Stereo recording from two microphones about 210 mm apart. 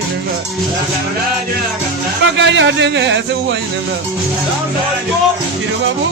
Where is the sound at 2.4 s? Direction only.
60° right (ahead or behind).